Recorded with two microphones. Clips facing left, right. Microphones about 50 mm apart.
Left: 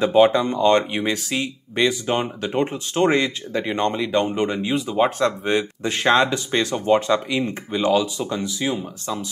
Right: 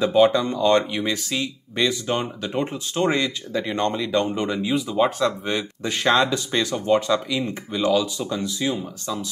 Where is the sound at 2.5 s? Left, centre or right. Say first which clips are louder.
Left 3 dB; left.